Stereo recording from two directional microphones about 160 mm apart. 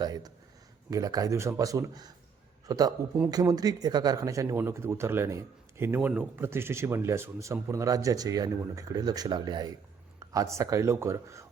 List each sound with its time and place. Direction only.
0.0 s a man's voice: 25° right (ahead or behind)